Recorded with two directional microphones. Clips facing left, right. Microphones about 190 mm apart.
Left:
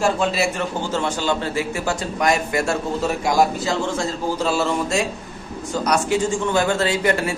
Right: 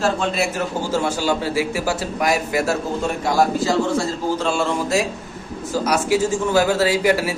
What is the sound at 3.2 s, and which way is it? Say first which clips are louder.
Speech: right 2 dB; 15° left (ahead or behind).